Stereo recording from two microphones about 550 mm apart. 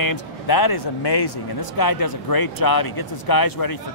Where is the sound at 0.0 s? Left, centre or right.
Left.